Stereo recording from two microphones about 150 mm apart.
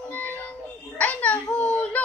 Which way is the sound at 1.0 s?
10° left (ahead or behind).